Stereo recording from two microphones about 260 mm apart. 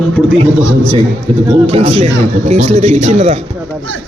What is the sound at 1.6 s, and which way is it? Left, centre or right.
A man's voice, right.